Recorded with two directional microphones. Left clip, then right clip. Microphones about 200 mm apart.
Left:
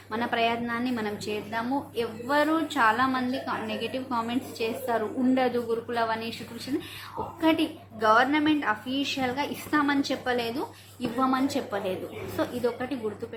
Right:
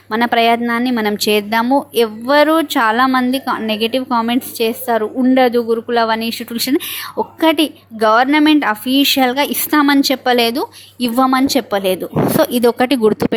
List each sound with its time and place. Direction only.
0.1 s a woman's voice: 45° right (ahead or behind)
7.4 s a woman's voice: 45° right (ahead or behind)